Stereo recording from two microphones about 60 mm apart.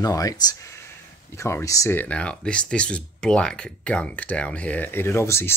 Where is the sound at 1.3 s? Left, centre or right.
Left.